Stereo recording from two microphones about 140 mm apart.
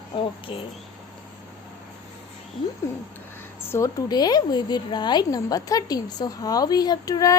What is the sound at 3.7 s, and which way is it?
A woman's voice, 25° left (ahead or behind).